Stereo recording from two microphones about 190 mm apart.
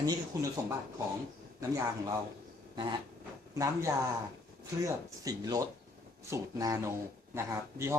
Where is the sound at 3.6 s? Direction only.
15° right (ahead or behind).